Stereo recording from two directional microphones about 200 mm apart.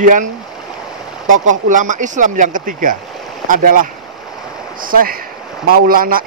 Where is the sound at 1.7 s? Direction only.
40° right (ahead or behind).